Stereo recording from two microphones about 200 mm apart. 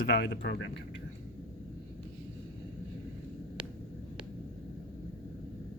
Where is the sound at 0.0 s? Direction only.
60° left (ahead or behind).